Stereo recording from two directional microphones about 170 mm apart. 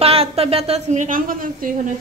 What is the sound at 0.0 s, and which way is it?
A woman's voice, 35° right (ahead or behind).